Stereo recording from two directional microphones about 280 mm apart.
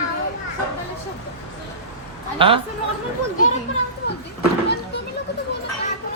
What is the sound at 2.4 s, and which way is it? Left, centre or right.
Speech, centre.